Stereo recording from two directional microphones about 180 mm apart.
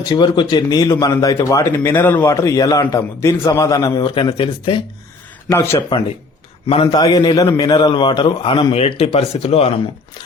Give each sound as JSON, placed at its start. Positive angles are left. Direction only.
{"t": 0.0, "sound": "speech", "side_deg": 20}
{"t": 5.5, "sound": "speech", "side_deg": 15}
{"t": 6.8, "sound": "speech", "side_deg": 20}